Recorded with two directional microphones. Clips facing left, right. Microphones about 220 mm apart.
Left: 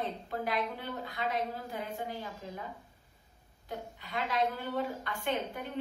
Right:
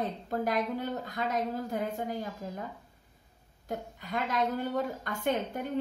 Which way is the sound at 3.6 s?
45° right (ahead or behind).